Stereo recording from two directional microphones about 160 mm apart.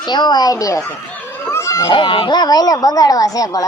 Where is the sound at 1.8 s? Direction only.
35° left (ahead or behind).